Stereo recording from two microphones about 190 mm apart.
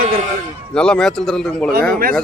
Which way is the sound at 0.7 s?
5° left (ahead or behind).